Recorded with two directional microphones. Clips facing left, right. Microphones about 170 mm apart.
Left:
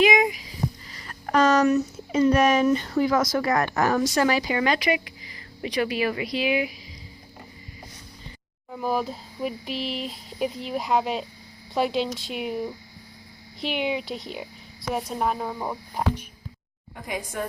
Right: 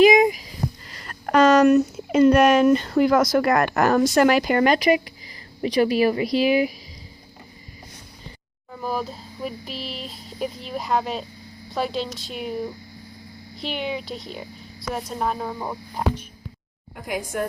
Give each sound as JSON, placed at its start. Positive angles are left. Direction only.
{"t": 0.0, "sound": "a sound", "side_deg": -40}
{"t": 0.9, "sound": "speech", "side_deg": -70}
{"t": 8.7, "sound": "speech", "side_deg": 10}
{"t": 17.1, "sound": "speech", "side_deg": 0}